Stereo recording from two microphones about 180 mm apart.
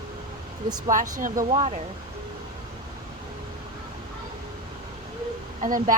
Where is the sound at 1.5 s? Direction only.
35° right (ahead or behind).